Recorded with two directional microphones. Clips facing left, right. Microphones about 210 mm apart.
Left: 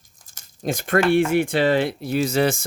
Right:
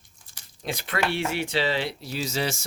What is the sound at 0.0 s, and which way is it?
Speech, 45° left (ahead or behind).